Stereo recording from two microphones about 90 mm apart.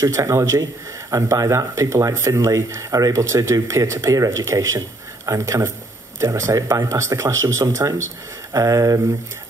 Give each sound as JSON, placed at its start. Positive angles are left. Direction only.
{"t": 0.0, "sound": "speech", "side_deg": -35}